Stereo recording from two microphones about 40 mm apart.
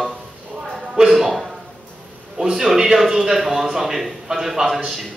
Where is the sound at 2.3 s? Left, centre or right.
Centre.